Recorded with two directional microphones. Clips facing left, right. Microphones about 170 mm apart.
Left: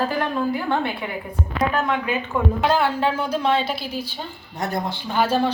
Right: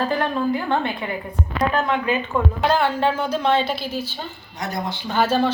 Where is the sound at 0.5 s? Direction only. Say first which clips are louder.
Right 1 dB; 10° left (ahead or behind).